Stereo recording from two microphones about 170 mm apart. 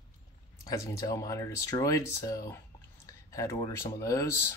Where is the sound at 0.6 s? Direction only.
20° left (ahead or behind).